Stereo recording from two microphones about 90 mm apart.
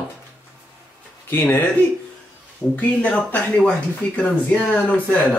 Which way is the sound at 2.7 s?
15° left (ahead or behind).